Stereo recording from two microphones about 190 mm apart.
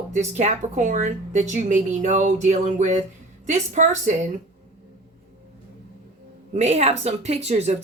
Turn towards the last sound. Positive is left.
turn(degrees=-35)  # may be behind; listen again after turning